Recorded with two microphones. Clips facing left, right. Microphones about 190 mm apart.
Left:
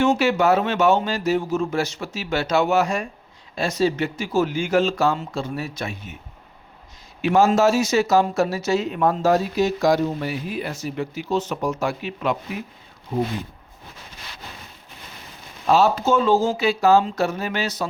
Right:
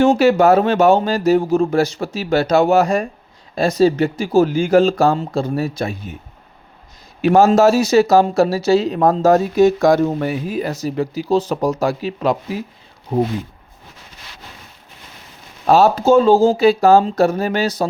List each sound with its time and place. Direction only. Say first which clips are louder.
0.0 s speech: right 6 dB; 35° right (ahead or behind)
7.2 s speech: right 5 dB; 40° right (ahead or behind); by 10.3 s 55° right (ahead or behind)
10.4 s speech: right 6 dB; 40° right (ahead or behind)
15.6 s speech: right 5 dB; 40° right (ahead or behind)